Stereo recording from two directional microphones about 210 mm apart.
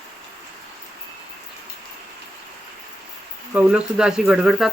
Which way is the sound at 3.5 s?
5° right (ahead or behind).